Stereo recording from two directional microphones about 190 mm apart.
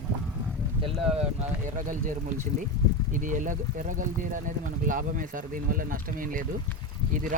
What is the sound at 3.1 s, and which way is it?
Speech, 40° right (ahead or behind).